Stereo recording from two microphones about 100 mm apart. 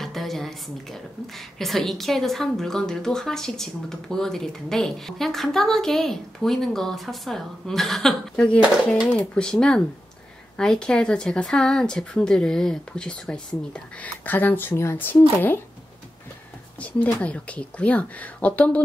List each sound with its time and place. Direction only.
0.0 s a woman's voice: centre (ahead or behind); by 15.6 s 20° left (ahead or behind)
16.8 s speech: 15° left (ahead or behind)